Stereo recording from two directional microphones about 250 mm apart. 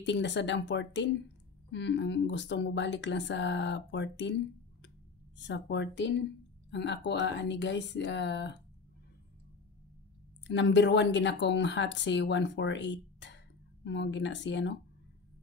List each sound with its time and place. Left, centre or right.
0.0 s speech: left
5.4 s speech: left
10.4 s speech: left